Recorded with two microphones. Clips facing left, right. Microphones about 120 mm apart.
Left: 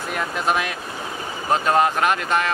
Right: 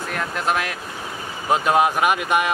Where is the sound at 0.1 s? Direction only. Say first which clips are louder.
Left 1 dB; centre (ahead or behind).